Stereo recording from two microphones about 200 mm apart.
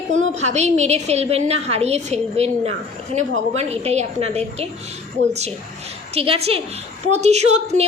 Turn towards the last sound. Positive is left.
turn(degrees=-35)  # may be behind; listen again after turning